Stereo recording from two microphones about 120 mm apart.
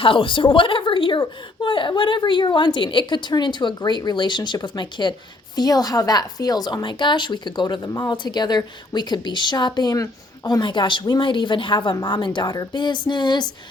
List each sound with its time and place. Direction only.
0.0 s a woman's voice: 45° left (ahead or behind)